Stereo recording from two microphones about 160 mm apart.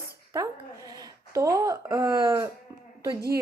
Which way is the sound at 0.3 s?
20° right (ahead or behind).